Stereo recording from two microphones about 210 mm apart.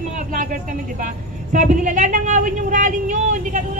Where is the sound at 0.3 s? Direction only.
40° right (ahead or behind).